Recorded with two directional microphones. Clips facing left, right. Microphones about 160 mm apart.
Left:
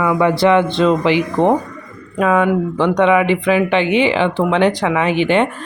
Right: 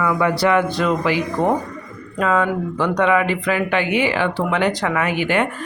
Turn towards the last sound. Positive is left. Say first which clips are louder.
# left 5 dB
turn(degrees=25)  # may be behind; listen again after turning